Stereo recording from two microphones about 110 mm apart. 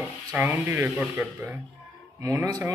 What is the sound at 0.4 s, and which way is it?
Speech, 20° right (ahead or behind).